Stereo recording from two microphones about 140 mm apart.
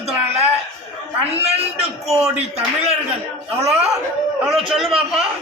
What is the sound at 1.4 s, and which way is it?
A man's voice, 50° right (ahead or behind).